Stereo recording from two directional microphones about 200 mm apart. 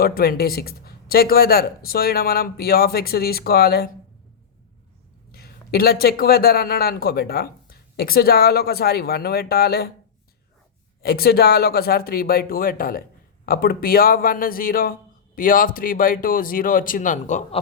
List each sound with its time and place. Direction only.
0.0 s a man's voice: 50° left (ahead or behind)
5.3 s a man's voice: 50° left (ahead or behind)
11.0 s a man's voice: 50° left (ahead or behind)